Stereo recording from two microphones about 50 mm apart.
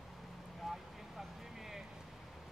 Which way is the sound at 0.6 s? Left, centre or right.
Centre.